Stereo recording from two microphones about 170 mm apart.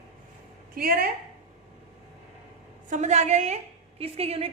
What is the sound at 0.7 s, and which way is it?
Speech, 60° right (ahead or behind).